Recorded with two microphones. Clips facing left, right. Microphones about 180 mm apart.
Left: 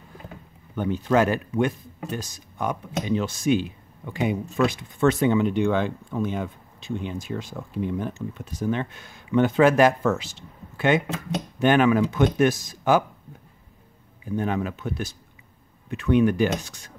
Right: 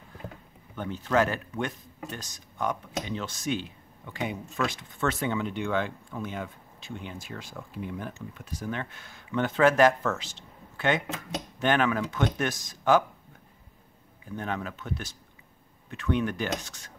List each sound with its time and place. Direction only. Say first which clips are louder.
0.7 s speech: left 5 dB; 15° left (ahead or behind)
14.3 s speech: left 7 dB; 10° left (ahead or behind)